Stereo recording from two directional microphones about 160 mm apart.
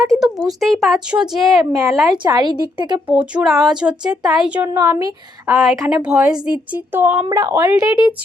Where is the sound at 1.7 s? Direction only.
20° right (ahead or behind).